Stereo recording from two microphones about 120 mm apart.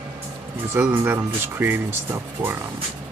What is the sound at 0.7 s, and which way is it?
Speech, 20° right (ahead or behind).